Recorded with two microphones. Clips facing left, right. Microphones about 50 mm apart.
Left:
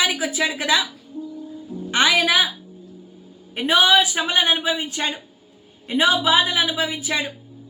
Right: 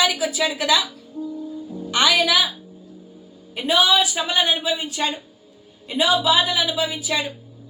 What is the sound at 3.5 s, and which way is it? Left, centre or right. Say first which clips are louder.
A woman's voice: left 2 dB; left.